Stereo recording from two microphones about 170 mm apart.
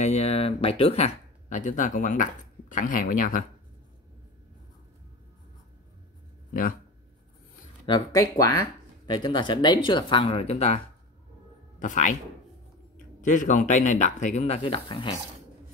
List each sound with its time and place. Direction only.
0.0 s speech: 40° left (ahead or behind)
7.8 s speech: 25° left (ahead or behind)
11.8 s speech: 50° left (ahead or behind)
13.2 s speech: 50° left (ahead or behind); by 15.1 s 30° left (ahead or behind)